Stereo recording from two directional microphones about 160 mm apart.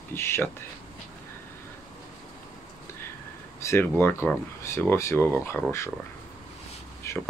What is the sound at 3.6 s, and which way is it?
Speech, 15° left (ahead or behind).